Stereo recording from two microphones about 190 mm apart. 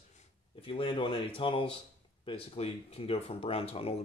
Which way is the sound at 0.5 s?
30° left (ahead or behind).